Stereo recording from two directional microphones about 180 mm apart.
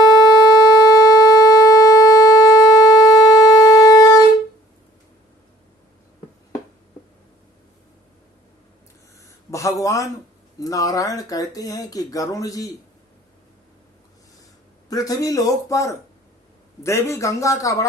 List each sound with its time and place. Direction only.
0.1 s shofar: 20° left (ahead or behind)
9.5 s a sound: 15° left (ahead or behind)
10.6 s speech: 20° left (ahead or behind)
14.8 s speech: 20° left (ahead or behind)